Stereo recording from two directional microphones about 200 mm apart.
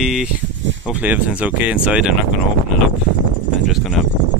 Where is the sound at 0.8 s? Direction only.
5° right (ahead or behind).